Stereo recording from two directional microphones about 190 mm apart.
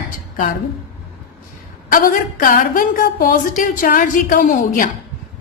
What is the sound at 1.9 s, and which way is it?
A woman's voice, 50° left (ahead or behind).